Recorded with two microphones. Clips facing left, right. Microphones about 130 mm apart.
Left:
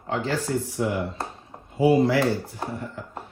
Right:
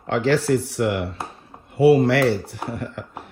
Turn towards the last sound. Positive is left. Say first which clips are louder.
# right 3 dB
turn(degrees=-80)